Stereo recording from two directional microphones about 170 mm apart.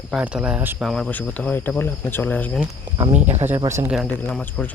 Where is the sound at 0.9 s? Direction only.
5° left (ahead or behind).